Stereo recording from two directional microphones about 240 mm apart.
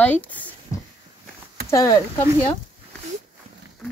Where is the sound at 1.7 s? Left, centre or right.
Centre.